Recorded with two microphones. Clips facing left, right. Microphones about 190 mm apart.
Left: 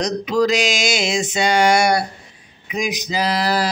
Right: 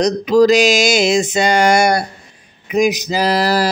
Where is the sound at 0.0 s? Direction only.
40° right (ahead or behind).